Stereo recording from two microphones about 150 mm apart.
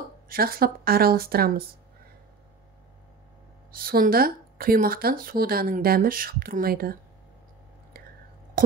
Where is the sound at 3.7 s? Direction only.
80° right.